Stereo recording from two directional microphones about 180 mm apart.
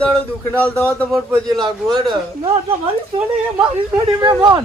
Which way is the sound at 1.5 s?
25° right (ahead or behind).